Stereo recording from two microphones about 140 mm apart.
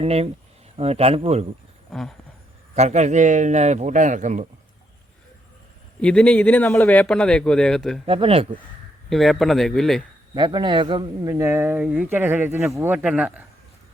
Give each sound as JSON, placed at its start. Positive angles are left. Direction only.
{"t": 0.0, "sound": "speech", "side_deg": -45}
{"t": 1.9, "sound": "a sound", "side_deg": 5}
{"t": 2.7, "sound": "a man's voice", "side_deg": -55}
{"t": 6.0, "sound": "a man's voice", "side_deg": 5}
{"t": 8.0, "sound": "speech", "side_deg": -40}
{"t": 9.0, "sound": "speech", "side_deg": 0}
{"t": 10.3, "sound": "a man's voice", "side_deg": -35}
{"t": 11.3, "sound": "speech", "side_deg": -20}